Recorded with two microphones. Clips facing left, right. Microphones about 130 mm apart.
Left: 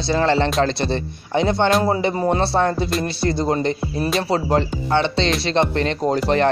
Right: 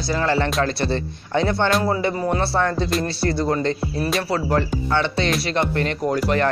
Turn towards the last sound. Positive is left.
turn(degrees=25)  # may be behind; listen again after turning